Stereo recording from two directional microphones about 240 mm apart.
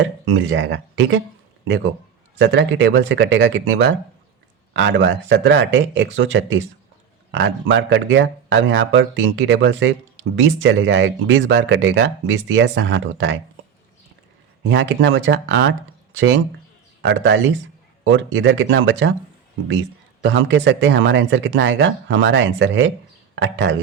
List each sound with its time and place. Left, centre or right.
0.0 s speech: right
2.3 s speech: right
14.7 s speech: right
20.2 s speech: right